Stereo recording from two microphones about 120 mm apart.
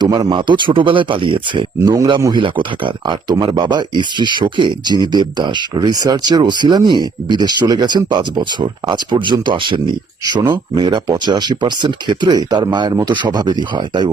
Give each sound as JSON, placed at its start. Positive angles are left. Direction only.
{"t": 0.0, "sound": "speech", "side_deg": -35}